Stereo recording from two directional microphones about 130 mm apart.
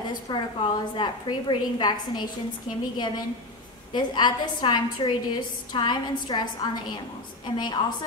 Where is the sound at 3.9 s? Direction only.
35° left (ahead or behind).